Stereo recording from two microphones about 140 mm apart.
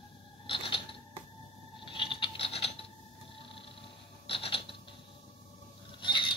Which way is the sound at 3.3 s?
40° left (ahead or behind).